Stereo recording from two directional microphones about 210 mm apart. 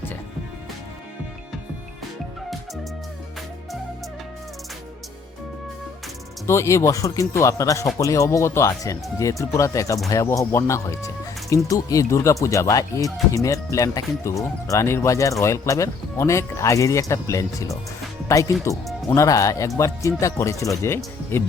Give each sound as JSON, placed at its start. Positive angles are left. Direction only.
{"t": 6.5, "sound": "speech", "side_deg": 15}